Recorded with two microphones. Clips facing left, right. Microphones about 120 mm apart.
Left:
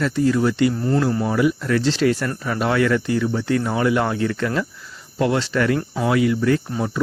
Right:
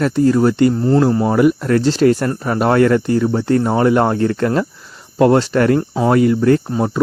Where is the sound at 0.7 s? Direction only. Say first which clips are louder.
Right 6 dB; 30° right (ahead or behind).